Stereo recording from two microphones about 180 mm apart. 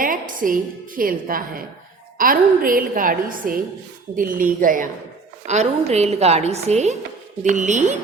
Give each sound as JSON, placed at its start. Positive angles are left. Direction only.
{"t": 0.0, "sound": "a woman's voice", "side_deg": -50}